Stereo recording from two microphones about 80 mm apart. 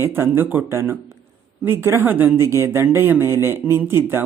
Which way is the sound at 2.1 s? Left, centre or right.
Right.